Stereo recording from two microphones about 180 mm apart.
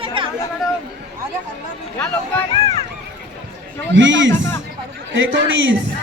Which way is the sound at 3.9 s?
90° right.